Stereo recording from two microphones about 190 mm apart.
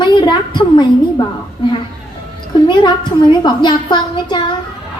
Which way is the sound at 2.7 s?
25° left (ahead or behind).